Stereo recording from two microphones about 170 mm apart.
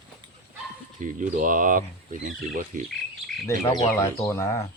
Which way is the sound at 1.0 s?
50° right (ahead or behind).